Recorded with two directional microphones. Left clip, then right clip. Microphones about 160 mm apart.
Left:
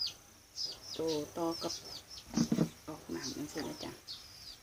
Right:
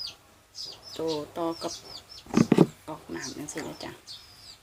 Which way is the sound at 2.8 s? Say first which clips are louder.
Right 5 dB; centre (ahead or behind).